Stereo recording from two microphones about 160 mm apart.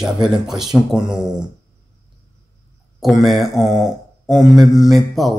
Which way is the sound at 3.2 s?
Centre (ahead or behind).